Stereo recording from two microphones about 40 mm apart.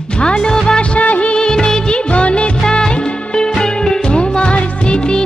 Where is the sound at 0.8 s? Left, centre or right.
Left.